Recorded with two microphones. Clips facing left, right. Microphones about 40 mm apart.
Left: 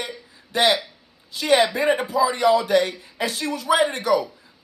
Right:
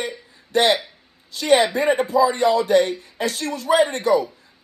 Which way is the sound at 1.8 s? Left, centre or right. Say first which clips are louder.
Right 2 dB; left.